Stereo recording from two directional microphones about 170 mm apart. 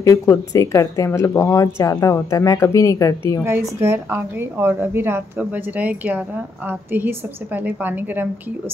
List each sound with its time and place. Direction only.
0.0 s speech: 15° left (ahead or behind)
3.4 s a woman's voice: 15° right (ahead or behind)